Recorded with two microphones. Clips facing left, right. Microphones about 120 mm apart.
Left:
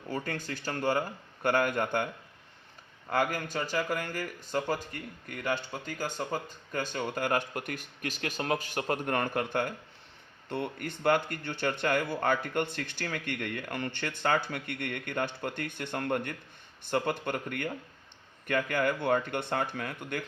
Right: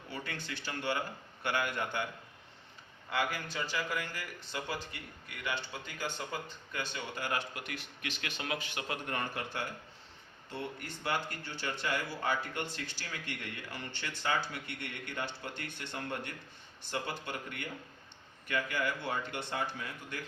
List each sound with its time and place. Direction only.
0.1 s speech: 45° left (ahead or behind)
3.1 s speech: 45° left (ahead or behind)